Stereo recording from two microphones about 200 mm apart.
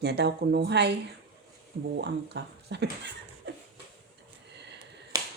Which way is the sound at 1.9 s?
55° right (ahead or behind).